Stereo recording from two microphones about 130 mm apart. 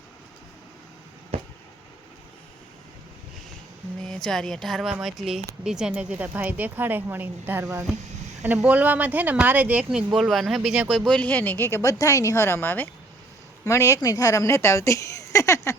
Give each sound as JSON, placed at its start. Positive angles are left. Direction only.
{"t": 1.3, "sound": "a sound", "side_deg": -50}
{"t": 4.0, "sound": "a woman's voice", "side_deg": 5}
{"t": 10.9, "sound": "a woman's voice", "side_deg": 5}